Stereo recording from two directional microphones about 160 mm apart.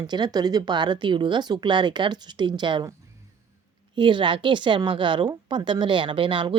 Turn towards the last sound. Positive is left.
turn(degrees=-30)  # may be behind; listen again after turning